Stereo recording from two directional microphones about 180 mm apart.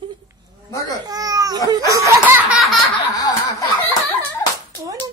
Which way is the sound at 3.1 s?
20° left (ahead or behind).